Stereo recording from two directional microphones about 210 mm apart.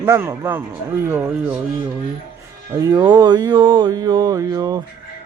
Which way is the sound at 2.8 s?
20° right (ahead or behind).